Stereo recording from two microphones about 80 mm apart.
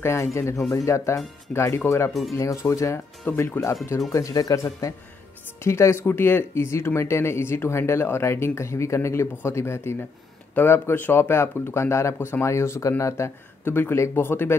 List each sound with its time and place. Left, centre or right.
0.0 s speech: left
3.3 s speech: left
4.1 s speech: left